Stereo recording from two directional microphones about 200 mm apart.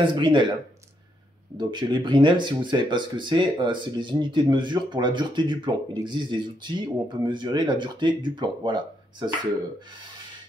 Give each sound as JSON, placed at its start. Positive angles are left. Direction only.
{"t": 0.0, "sound": "speech", "side_deg": -25}
{"t": 1.6, "sound": "speech", "side_deg": -20}